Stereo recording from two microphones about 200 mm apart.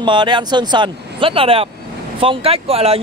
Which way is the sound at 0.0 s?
25° right (ahead or behind).